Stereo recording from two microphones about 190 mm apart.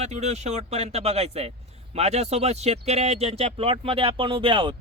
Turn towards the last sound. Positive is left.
turn(degrees=-25)  # may be behind; listen again after turning